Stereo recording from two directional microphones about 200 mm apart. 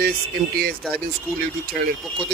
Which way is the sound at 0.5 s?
50° right (ahead or behind).